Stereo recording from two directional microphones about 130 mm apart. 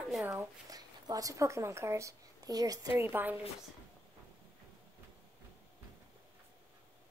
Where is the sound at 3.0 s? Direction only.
15° right (ahead or behind).